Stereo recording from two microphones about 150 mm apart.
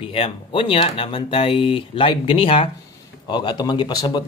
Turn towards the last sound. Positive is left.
turn(degrees=30)  # may be behind; listen again after turning